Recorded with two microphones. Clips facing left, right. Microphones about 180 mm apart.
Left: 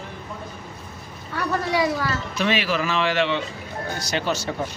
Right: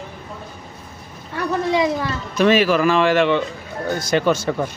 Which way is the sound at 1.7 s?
20° right (ahead or behind).